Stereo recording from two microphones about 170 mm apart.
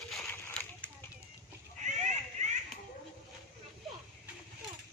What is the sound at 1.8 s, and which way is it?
Splash, 45° right (ahead or behind).